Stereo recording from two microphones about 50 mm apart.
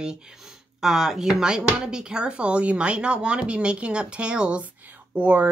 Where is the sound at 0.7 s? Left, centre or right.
Centre.